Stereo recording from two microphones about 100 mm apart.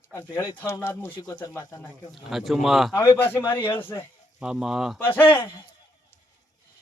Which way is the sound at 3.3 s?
20° left (ahead or behind).